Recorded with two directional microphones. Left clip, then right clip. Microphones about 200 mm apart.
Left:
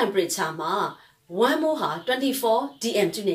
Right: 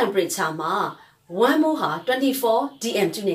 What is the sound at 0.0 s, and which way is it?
Speech, 10° left (ahead or behind).